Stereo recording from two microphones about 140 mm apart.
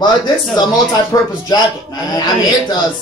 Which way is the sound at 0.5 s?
30° left (ahead or behind).